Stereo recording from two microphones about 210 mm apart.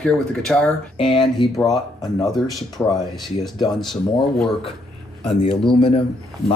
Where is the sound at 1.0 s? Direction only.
25° left (ahead or behind).